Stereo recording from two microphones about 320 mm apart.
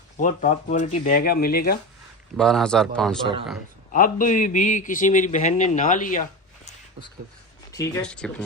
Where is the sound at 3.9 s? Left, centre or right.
Left.